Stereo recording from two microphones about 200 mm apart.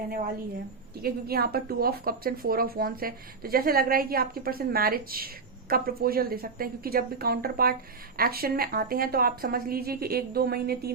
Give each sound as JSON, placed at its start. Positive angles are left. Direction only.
{"t": 1.0, "sound": "a woman's voice", "side_deg": -50}